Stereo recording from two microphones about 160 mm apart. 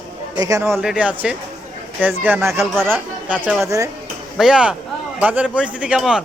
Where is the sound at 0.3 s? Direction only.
20° right (ahead or behind).